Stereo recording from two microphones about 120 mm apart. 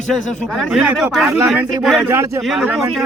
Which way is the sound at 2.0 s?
25° right (ahead or behind).